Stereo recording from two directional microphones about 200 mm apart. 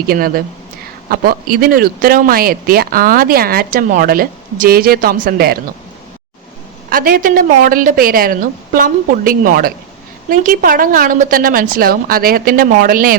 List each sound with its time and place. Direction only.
0.1 s speech: 50° right (ahead or behind)
6.9 s speech: 45° right (ahead or behind)